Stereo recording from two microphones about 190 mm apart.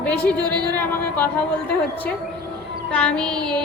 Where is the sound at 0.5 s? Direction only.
20° right (ahead or behind).